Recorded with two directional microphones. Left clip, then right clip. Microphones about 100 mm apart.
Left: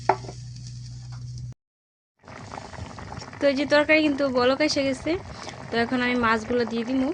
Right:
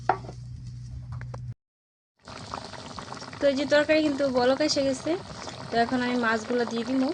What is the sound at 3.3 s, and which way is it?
Speech, 30° left (ahead or behind).